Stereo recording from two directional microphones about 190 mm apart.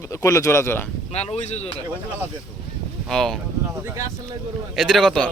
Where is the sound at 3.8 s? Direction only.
15° right (ahead or behind).